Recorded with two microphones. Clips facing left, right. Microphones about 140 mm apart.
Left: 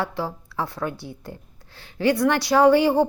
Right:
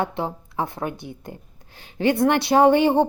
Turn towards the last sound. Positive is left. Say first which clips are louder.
# even
turn(degrees=-20)  # may be behind; listen again after turning